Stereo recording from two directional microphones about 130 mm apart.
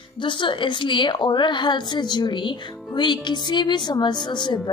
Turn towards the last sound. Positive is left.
turn(degrees=35)  # may be behind; listen again after turning